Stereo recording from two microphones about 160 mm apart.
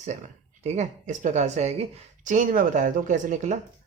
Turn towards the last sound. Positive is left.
turn(degrees=-50)  # may be behind; listen again after turning